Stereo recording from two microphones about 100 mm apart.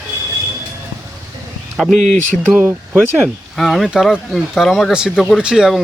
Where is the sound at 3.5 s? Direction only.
Centre (ahead or behind).